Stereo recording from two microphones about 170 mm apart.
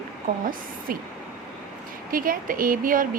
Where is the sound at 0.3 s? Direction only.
55° right (ahead or behind).